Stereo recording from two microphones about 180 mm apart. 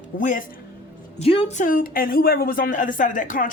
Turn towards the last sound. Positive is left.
turn(degrees=45)  # may be behind; listen again after turning